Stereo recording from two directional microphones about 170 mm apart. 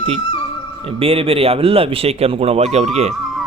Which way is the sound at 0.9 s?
35° right (ahead or behind).